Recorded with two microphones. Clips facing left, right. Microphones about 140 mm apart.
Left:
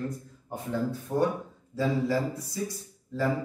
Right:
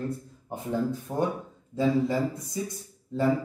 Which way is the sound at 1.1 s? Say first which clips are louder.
Left 2 dB; 15° right (ahead or behind).